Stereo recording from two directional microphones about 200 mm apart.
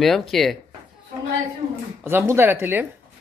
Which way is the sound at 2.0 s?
10° right (ahead or behind).